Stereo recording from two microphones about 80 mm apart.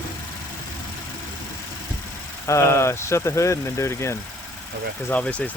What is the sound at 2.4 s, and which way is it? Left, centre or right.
Speech, left.